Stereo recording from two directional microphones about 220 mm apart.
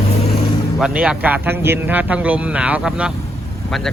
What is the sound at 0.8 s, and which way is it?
Speech, 5° right (ahead or behind).